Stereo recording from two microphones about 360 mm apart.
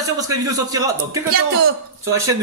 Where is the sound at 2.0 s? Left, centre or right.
Centre.